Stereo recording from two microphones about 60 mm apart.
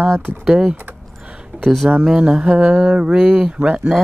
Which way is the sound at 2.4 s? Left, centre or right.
Right.